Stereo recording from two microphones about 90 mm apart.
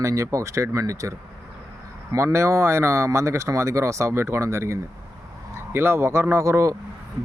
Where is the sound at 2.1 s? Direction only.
30° right (ahead or behind).